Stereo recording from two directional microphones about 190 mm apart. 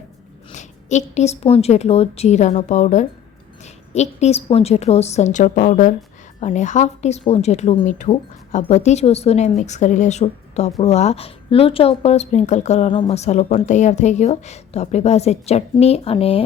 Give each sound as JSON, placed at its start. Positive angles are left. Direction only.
{"t": 0.5, "sound": "a woman's voice", "side_deg": 40}